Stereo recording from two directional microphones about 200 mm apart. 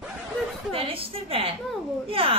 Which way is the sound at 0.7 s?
30° right (ahead or behind).